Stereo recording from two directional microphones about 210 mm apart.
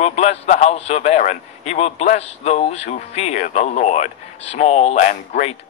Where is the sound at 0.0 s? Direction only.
30° left (ahead or behind).